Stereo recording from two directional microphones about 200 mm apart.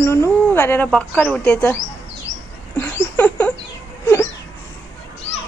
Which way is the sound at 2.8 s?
10° left (ahead or behind).